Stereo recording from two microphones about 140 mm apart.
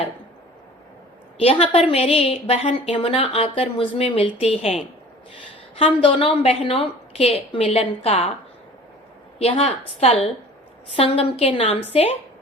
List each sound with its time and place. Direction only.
1.4 s a woman's voice: 45° left (ahead or behind)
9.4 s a woman's voice: 45° left (ahead or behind)